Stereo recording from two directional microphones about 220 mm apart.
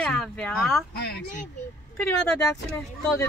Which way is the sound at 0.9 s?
50° left (ahead or behind).